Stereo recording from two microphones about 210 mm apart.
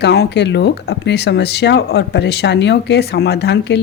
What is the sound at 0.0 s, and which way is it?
A woman's voice, 50° left (ahead or behind).